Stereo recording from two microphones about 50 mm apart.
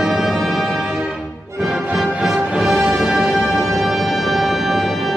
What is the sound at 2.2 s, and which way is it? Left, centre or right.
Music, centre.